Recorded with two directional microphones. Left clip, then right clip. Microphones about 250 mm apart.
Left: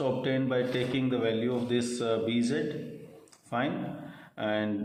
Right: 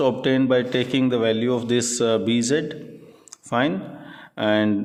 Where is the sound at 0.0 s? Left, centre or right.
Right.